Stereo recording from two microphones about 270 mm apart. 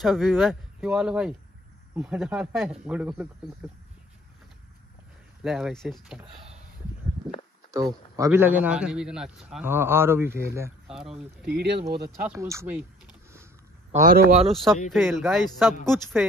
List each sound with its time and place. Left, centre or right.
0.0 s a man's voice: centre
5.4 s a man's voice: centre
8.2 s a man's voice: centre
11.4 s speech: right
12.2 s a man's voice: centre
13.9 s speech: right
14.5 s a man's voice: centre